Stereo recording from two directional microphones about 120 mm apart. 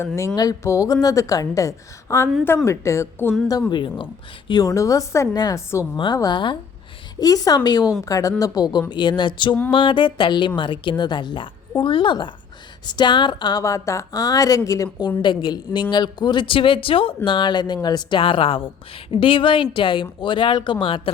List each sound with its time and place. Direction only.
0.3 s a woman's voice: 30° left (ahead or behind)
3.7 s speech: 45° left (ahead or behind)
4.4 s a woman's voice: 35° left (ahead or behind)
6.1 s speech: 35° left (ahead or behind)